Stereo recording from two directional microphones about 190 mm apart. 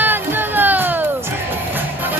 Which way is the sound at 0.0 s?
10° right (ahead or behind).